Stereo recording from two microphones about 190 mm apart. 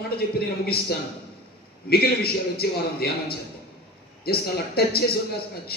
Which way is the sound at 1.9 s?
55° left (ahead or behind).